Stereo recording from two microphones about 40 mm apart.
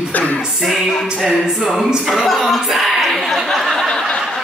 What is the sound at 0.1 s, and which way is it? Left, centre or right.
Music, left.